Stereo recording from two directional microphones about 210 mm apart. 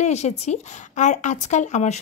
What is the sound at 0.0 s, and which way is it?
A woman's voice, 30° left (ahead or behind).